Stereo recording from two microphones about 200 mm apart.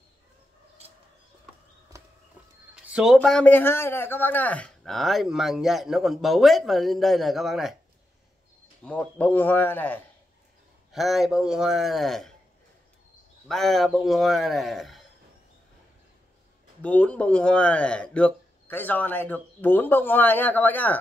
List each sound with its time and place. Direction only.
2.7 s a man's voice: centre (ahead or behind)
8.8 s a man's voice: 5° left (ahead or behind)
13.5 s a man's voice: centre (ahead or behind)
16.8 s speech: 5° left (ahead or behind)